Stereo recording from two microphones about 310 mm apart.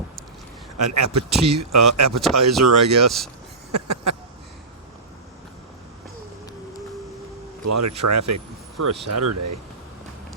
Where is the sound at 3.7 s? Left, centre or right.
Right.